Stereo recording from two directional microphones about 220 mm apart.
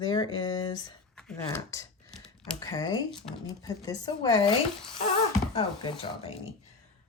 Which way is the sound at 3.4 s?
15° left (ahead or behind).